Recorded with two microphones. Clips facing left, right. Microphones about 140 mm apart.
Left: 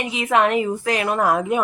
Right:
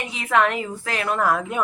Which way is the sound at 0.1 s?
20° left (ahead or behind).